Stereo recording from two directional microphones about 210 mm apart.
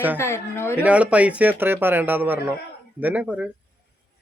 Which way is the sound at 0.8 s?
5° right (ahead or behind).